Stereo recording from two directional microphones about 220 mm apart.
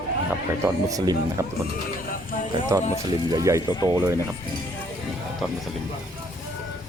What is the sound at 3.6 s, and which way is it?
Speech, 15° left (ahead or behind).